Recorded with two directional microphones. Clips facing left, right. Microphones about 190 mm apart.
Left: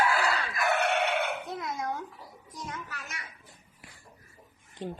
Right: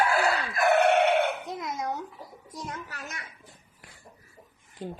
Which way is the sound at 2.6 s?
35° right (ahead or behind).